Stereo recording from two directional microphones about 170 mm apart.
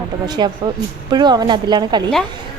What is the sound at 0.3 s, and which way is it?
A woman's voice, 25° right (ahead or behind).